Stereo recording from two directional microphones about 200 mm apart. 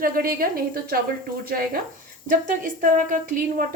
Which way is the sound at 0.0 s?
45° right (ahead or behind).